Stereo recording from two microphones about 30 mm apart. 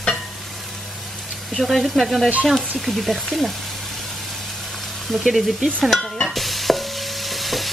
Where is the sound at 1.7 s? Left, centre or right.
Centre.